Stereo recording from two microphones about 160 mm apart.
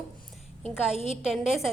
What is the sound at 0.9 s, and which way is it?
Speech, 45° left (ahead or behind).